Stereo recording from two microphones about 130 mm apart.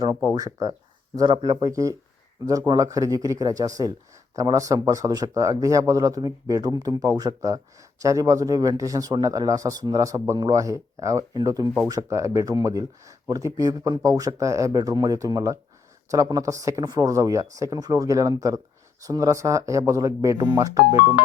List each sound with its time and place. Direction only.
0.3 s speech: 25° right (ahead or behind)
1.1 s speech: 40° right (ahead or behind)
1.5 s speech: 25° right (ahead or behind)